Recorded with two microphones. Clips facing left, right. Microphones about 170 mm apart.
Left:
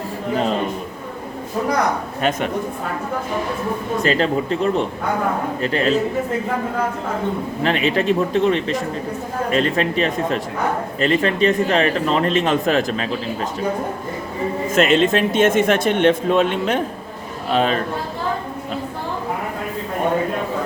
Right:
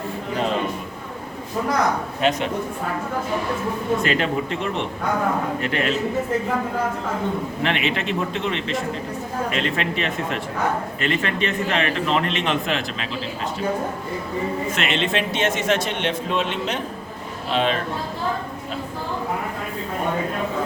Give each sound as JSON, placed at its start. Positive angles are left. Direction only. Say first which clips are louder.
{"t": 2.2, "sound": "a man's voice", "louder": "even", "side_deg": 50}
{"t": 4.0, "sound": "a man's voice", "louder": "left 4 dB", "side_deg": 35}
{"t": 7.6, "sound": "a man's voice", "louder": "left 6 dB", "side_deg": 35}
{"t": 14.7, "sound": "a man's voice", "louder": "left 12 dB", "side_deg": 45}